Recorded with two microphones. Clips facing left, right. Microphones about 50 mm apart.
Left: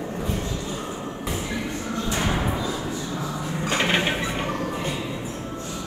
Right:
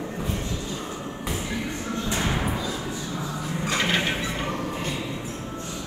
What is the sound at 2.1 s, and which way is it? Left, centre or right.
Music, left.